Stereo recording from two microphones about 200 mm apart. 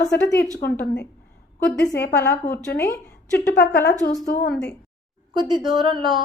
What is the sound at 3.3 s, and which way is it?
Speech, 55° left (ahead or behind).